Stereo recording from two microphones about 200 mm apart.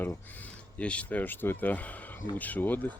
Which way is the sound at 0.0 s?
10° left (ahead or behind).